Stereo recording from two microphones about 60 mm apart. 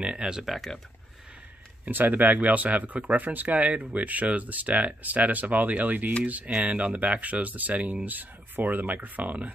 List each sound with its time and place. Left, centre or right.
0.0 s speech: centre
1.9 s speech: right